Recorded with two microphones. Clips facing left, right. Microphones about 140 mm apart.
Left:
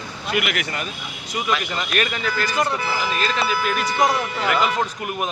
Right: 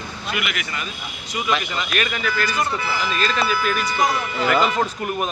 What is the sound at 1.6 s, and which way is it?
Speech, 45° left (ahead or behind).